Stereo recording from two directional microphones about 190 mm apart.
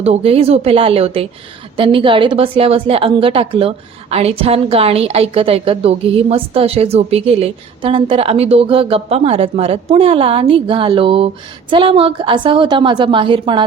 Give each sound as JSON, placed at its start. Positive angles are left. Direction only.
{"t": 0.0, "sound": "a woman's voice", "side_deg": -35}